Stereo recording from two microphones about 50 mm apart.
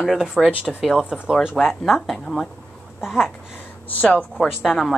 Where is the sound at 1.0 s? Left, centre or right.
Centre.